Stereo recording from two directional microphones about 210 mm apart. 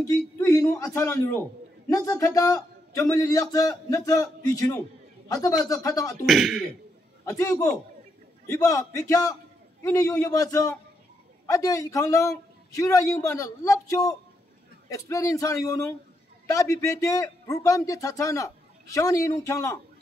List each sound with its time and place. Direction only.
0.0 s speech: 15° left (ahead or behind)
6.2 s speech: centre (ahead or behind)
7.2 s speech: 15° left (ahead or behind)